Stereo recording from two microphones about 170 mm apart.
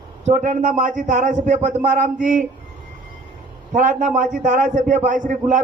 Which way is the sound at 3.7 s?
45° right (ahead or behind).